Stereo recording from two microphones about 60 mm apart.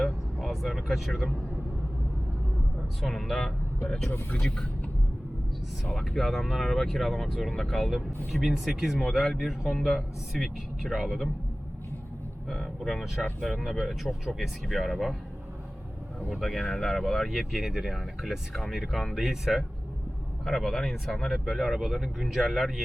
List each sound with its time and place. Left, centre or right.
0.0 s vehicle: centre
3.0 s speech: centre
4.1 s speech: left
4.4 s speech: centre
5.8 s speech: centre
12.5 s speech: centre
16.3 s speech: centre
20.4 s speech: centre